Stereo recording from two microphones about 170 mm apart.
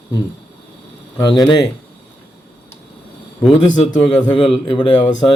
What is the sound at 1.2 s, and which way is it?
Speech, 25° left (ahead or behind).